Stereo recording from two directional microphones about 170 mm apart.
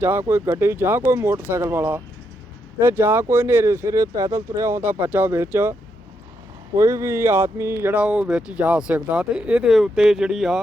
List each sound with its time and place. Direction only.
0.0 s speech: 15° right (ahead or behind)
6.7 s speech: 15° right (ahead or behind); by 10.6 s centre (ahead or behind)